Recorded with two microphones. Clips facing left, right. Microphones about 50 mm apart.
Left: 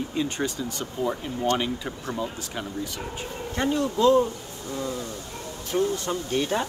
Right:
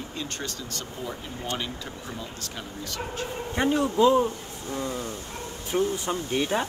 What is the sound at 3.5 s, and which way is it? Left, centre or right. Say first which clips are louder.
Speech: right 1 dB; centre.